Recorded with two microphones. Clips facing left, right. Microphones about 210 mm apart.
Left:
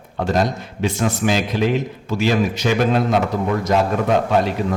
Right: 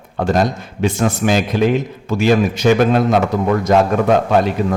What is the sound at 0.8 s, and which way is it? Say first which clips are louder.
A man's voice: right 3 dB; 50° right (ahead or behind).